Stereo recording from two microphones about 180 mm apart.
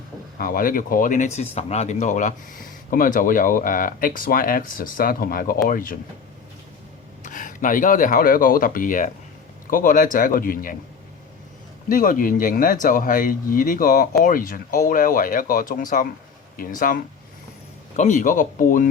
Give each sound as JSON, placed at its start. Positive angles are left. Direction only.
{"t": 0.3, "sound": "speech", "side_deg": 55}
{"t": 7.3, "sound": "speech", "side_deg": 45}
{"t": 11.9, "sound": "speech", "side_deg": 50}